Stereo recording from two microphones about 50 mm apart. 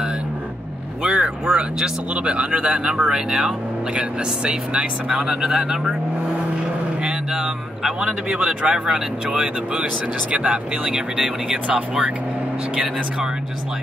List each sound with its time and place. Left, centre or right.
1.0 s speech: centre
3.0 s speech: centre
3.9 s speech: right
7.0 s speech: centre